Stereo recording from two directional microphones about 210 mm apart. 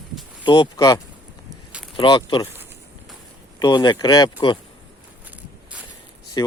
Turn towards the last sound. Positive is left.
turn(degrees=20)  # may be behind; listen again after turning